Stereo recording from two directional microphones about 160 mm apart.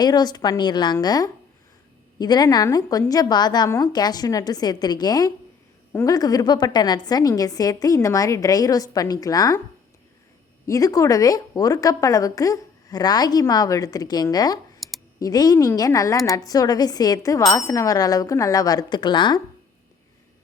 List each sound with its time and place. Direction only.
0.0 s a woman's voice: 25° left (ahead or behind)
10.7 s a woman's voice: 20° left (ahead or behind)
14.8 s computer keyboard: centre (ahead or behind)
15.2 s a woman's voice: 25° left (ahead or behind)